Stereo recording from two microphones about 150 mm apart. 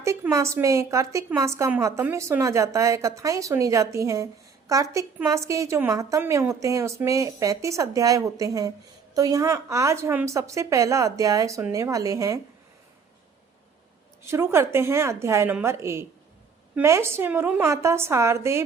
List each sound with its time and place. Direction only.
0.0 s a woman's voice: 20° right (ahead or behind)
14.3 s a woman's voice: 15° right (ahead or behind)